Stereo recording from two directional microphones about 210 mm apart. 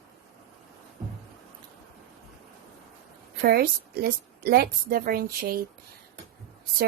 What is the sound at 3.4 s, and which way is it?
Speech, 45° right (ahead or behind).